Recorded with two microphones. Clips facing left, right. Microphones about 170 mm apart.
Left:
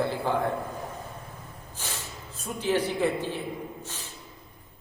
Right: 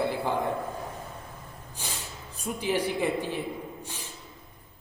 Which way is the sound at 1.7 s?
15° right (ahead or behind).